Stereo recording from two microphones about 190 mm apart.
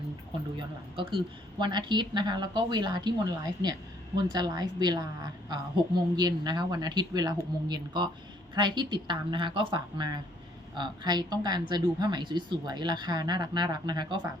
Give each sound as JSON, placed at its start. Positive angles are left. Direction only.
{"t": 0.9, "sound": "a woman's voice", "side_deg": -25}
{"t": 4.3, "sound": "a woman's voice", "side_deg": -20}